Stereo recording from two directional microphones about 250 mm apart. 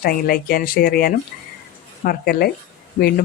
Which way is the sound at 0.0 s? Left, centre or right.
Left.